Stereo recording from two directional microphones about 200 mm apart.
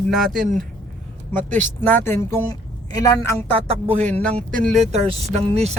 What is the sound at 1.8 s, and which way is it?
A woman's voice, 10° left (ahead or behind).